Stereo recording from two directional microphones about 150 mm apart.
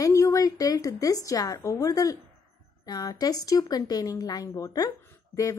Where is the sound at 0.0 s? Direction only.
20° left (ahead or behind).